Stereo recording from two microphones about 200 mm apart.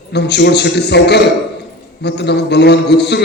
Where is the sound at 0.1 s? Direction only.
55° left (ahead or behind).